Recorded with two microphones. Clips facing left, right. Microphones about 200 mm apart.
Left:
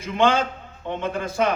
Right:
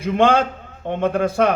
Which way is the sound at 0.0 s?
60° right (ahead or behind).